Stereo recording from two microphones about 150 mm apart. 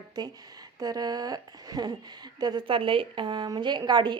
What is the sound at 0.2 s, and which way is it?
A woman's voice, 25° right (ahead or behind).